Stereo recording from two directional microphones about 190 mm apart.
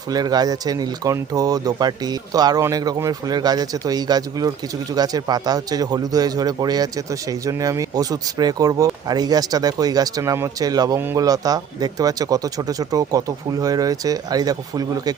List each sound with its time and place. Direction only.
0.1 s a man's voice: 20° right (ahead or behind)